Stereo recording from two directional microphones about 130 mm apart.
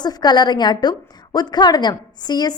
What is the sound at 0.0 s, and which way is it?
A woman's voice, 30° left (ahead or behind).